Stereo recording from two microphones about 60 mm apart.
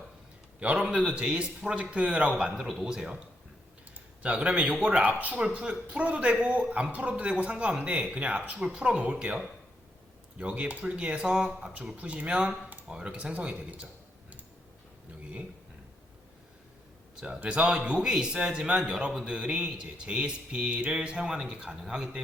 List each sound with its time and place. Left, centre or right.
0.8 s speech: centre
4.2 s a man's voice: right
17.2 s speech: centre